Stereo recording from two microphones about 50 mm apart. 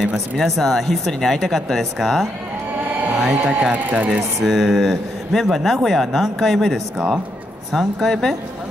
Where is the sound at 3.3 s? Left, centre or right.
Right.